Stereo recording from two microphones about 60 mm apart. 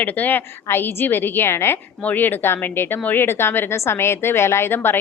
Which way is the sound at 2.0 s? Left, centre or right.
Left.